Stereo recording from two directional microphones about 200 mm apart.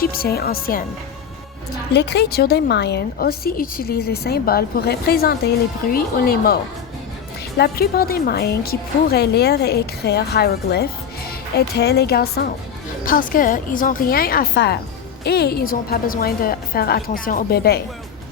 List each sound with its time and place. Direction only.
0.0 s a woman's voice: 50° left (ahead or behind)
1.9 s a woman's voice: 55° left (ahead or behind)
7.6 s a woman's voice: 50° left (ahead or behind)